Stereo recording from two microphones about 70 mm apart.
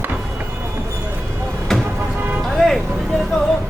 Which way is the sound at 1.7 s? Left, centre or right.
Centre.